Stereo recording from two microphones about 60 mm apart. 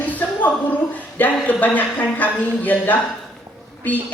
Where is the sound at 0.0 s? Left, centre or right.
Left.